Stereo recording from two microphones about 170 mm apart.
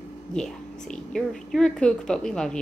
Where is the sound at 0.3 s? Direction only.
5° left (ahead or behind).